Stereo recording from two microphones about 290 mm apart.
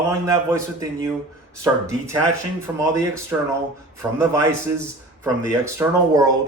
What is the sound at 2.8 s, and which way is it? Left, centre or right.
A man's voice, centre.